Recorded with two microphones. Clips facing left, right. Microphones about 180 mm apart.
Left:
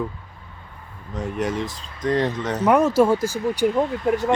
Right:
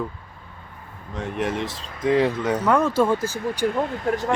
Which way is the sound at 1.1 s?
Centre (ahead or behind).